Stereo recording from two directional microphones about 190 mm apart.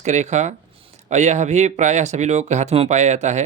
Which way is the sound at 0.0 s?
35° right (ahead or behind).